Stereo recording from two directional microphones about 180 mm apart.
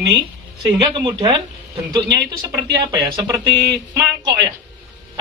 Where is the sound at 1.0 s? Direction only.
25° right (ahead or behind).